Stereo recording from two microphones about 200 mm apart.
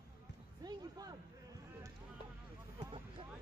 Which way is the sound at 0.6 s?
20° right (ahead or behind).